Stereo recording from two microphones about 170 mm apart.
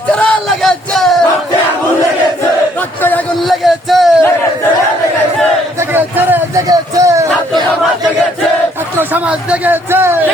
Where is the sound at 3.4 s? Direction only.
Centre (ahead or behind).